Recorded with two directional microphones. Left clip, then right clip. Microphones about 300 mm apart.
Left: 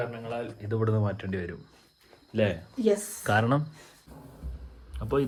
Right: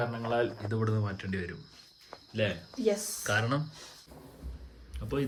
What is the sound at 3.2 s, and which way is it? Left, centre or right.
Speech, centre.